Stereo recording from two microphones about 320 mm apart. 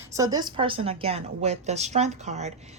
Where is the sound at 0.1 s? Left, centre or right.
Centre.